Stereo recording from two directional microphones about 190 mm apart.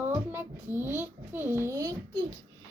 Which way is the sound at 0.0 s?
10° right (ahead or behind).